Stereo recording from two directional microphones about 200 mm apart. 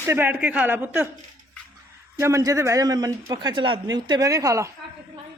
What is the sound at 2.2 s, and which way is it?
A man's voice, 15° right (ahead or behind).